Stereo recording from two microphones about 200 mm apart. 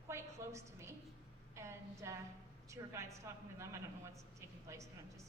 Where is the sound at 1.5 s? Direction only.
15° right (ahead or behind).